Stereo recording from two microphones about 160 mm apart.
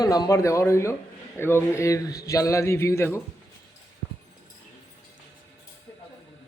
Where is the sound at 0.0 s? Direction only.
20° left (ahead or behind).